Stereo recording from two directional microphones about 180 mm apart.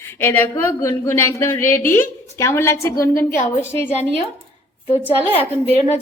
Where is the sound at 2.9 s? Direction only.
55° left (ahead or behind).